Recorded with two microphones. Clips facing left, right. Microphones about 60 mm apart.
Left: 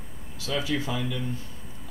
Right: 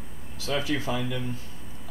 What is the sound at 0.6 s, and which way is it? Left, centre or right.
Speech, right.